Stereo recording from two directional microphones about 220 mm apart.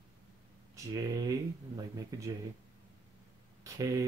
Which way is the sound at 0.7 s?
15° right (ahead or behind).